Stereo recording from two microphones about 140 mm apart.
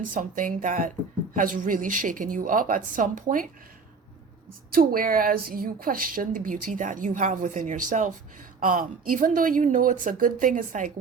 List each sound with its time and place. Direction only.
0.1 s a woman's voice: 75° right (ahead or behind)
4.7 s a woman's voice: 90° right; by 8.1 s 65° right (ahead or behind)
8.6 s a woman's voice: 85° right